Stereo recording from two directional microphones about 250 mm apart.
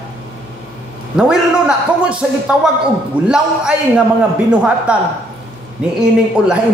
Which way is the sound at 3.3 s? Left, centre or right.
Centre.